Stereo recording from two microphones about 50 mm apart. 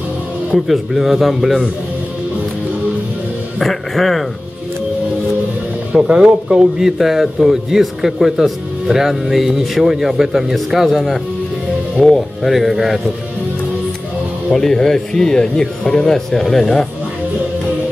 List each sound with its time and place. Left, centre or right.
0.7 s a man's voice: centre
3.5 s a man's voice: centre
5.9 s speech: centre
6.8 s a man's voice: centre
14.5 s speech: centre